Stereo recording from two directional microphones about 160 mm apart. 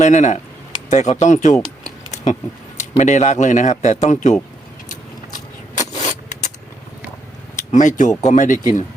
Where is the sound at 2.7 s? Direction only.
45° left (ahead or behind).